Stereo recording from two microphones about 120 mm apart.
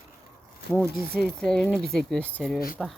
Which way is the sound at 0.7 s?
10° left (ahead or behind).